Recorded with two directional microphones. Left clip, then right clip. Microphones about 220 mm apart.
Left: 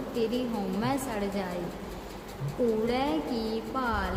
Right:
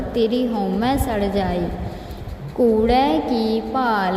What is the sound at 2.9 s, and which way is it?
A woman's voice, 30° right (ahead or behind).